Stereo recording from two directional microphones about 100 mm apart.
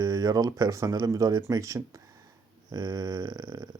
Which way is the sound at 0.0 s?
40° right (ahead or behind).